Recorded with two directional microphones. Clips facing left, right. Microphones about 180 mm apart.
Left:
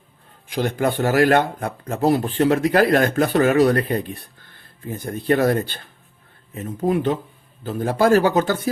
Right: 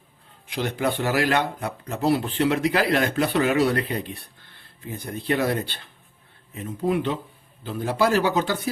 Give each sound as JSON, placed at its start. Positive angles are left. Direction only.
{"t": 0.4, "sound": "speech", "side_deg": 45}